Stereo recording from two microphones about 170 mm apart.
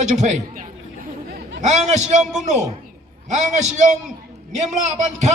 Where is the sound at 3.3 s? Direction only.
45° right (ahead or behind).